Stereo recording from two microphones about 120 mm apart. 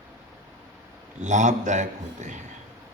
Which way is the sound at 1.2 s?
90° right.